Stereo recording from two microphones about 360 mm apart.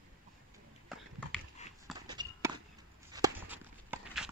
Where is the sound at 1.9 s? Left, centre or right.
Centre.